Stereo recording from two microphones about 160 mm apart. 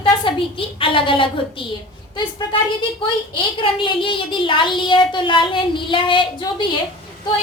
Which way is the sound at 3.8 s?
30° left (ahead or behind).